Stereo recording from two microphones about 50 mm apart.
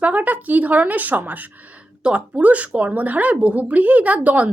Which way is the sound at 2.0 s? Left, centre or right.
Right.